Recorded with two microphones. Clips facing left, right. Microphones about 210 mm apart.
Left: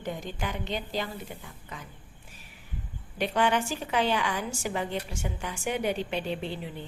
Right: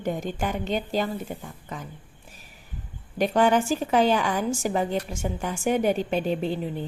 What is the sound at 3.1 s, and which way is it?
A woman's voice, 45° right (ahead or behind).